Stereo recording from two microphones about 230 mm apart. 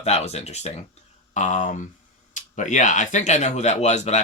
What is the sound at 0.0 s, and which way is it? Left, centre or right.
Speech, left.